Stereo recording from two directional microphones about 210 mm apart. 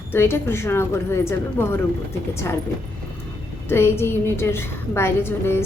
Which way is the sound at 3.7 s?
10° left (ahead or behind).